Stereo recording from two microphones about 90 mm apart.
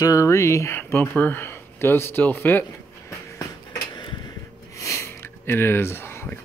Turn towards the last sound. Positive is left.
turn(degrees=25)  # may be behind; listen again after turning